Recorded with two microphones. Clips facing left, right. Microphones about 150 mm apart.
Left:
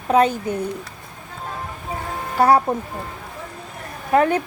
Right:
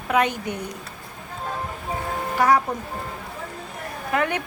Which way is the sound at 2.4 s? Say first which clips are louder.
Left 4 dB; 30° left (ahead or behind).